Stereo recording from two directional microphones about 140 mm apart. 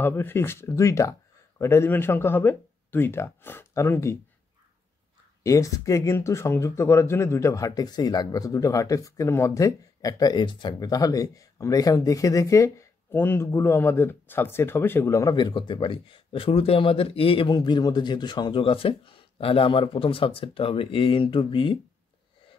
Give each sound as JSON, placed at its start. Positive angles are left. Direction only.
{"t": 0.0, "sound": "speech", "side_deg": 15}
{"t": 5.4, "sound": "speech", "side_deg": 20}
{"t": 17.6, "sound": "speech", "side_deg": 30}